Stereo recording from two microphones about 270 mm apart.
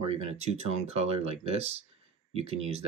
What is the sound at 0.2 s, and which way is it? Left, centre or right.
Speech, right.